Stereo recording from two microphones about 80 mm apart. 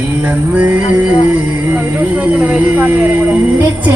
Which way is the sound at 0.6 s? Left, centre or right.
Centre.